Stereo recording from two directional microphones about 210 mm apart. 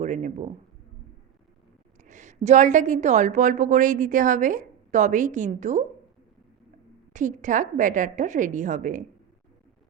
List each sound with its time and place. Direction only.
0.0 s a sound: 35° right (ahead or behind)
2.0 s a woman's voice: 35° right (ahead or behind)
7.1 s a woman's voice: 35° right (ahead or behind)